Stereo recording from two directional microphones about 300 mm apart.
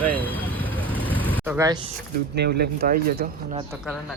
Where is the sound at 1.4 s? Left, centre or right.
Centre.